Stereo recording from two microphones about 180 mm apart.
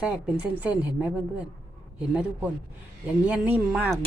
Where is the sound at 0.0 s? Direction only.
5° right (ahead or behind).